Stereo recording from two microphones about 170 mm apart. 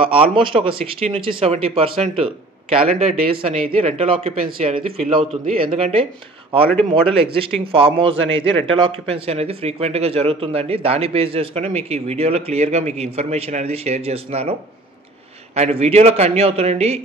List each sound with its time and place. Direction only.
0.0 s a man's voice: 30° right (ahead or behind)
15.5 s a man's voice: 40° right (ahead or behind)